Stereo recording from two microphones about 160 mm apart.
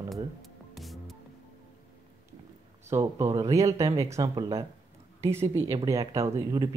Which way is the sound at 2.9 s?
20° right (ahead or behind).